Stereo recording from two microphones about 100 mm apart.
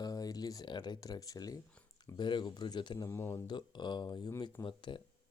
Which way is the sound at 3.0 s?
25° left (ahead or behind).